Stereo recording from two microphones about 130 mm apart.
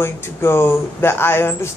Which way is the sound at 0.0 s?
20° left (ahead or behind).